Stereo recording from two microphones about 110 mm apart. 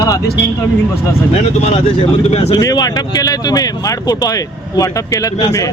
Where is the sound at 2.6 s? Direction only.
35° left (ahead or behind).